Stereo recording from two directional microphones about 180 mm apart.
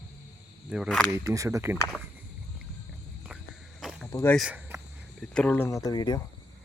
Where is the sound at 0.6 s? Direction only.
5° right (ahead or behind).